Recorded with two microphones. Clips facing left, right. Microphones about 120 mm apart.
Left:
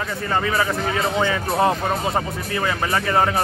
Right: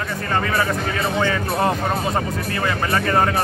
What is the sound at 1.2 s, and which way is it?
Speech, 15° left (ahead or behind).